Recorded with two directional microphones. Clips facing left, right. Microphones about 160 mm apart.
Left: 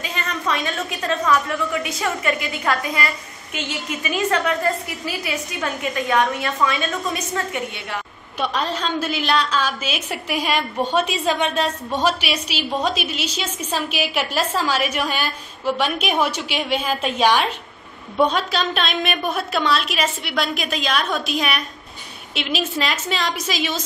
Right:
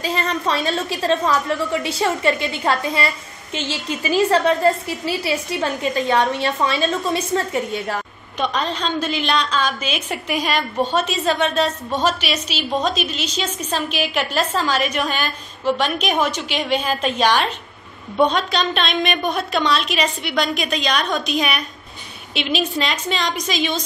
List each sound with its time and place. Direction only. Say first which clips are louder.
0.0 s a woman's voice: right 4 dB; 35° right (ahead or behind)
8.4 s a woman's voice: right 1 dB; 5° left (ahead or behind)